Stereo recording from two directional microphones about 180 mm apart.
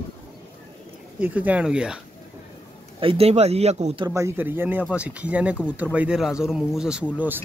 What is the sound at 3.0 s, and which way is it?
Speech, 30° right (ahead or behind).